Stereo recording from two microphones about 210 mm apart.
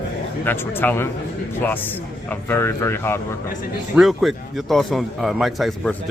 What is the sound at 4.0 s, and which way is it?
Speech, centre (ahead or behind).